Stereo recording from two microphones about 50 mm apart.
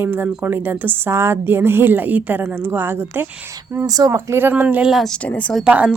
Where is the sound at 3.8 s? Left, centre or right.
Right.